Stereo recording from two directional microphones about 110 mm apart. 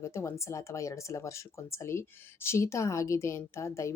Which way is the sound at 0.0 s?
25° left (ahead or behind).